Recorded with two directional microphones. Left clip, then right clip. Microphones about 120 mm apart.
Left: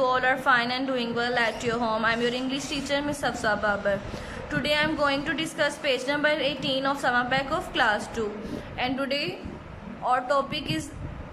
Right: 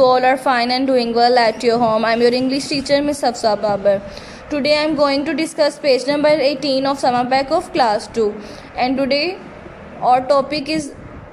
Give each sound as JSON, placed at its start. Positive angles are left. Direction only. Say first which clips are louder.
{"t": 0.1, "sound": "a woman's voice", "louder": "right 8 dB", "side_deg": -40}